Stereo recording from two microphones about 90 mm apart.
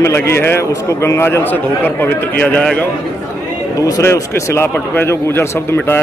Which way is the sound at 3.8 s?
35° left (ahead or behind).